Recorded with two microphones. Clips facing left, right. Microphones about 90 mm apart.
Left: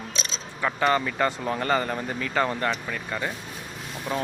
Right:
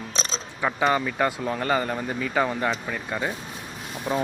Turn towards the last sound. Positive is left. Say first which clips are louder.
# right 3 dB
turn(degrees=-15)  # may be behind; listen again after turning